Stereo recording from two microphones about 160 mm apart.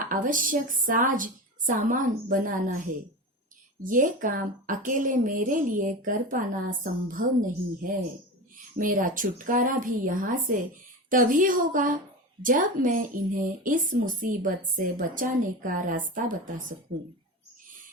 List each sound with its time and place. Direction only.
0.0 s a woman's voice: 55° right (ahead or behind)
8.5 s a woman's voice: 60° right (ahead or behind)